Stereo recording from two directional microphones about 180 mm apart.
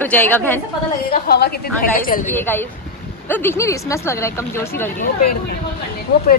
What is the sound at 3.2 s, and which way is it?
A woman's voice, 15° left (ahead or behind).